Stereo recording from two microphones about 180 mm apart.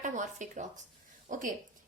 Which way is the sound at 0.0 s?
45° right (ahead or behind).